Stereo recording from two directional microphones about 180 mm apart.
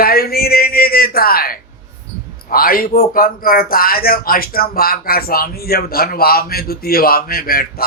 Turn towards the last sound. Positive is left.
turn(degrees=55)  # may be behind; listen again after turning